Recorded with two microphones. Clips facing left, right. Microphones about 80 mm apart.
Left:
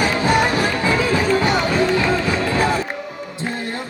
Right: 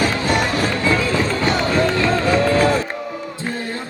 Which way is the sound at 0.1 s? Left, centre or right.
Left.